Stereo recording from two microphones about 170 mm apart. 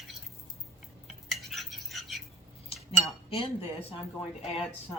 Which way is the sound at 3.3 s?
30° left (ahead or behind).